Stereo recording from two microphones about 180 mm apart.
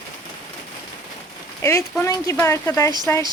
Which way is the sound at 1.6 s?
15° left (ahead or behind).